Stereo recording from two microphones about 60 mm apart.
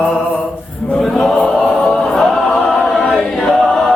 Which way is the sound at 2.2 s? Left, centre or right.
Centre.